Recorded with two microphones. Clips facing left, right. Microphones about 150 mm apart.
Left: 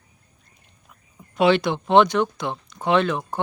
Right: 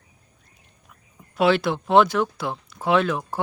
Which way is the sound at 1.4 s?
Centre (ahead or behind).